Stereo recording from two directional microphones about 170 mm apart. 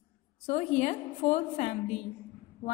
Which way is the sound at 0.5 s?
40° left (ahead or behind).